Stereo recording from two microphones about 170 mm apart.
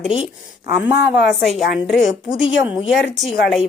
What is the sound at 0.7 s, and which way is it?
A woman's voice, 5° right (ahead or behind).